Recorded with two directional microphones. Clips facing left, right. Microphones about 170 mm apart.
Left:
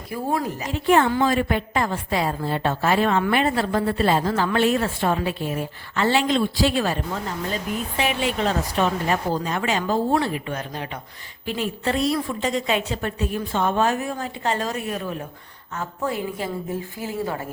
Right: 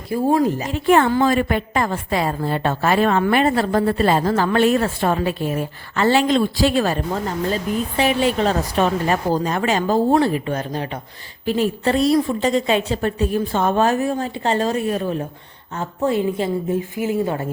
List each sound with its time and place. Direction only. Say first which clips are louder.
0.1 s a woman's voice: right 8 dB; 40° right (ahead or behind)
0.9 s a woman's voice: right 3 dB; 55° right (ahead or behind); by 17.3 s 20° right (ahead or behind)